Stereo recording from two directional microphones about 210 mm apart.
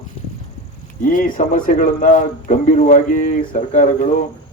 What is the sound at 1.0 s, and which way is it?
A man's voice, 40° left (ahead or behind).